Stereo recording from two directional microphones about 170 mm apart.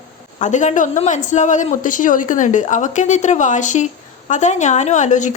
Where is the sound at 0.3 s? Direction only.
45° left (ahead or behind).